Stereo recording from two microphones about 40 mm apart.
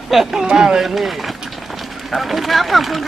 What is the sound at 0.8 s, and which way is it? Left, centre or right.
Speech, centre.